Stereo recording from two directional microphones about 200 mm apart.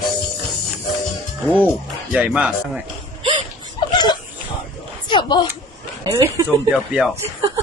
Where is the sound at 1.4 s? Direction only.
5° left (ahead or behind).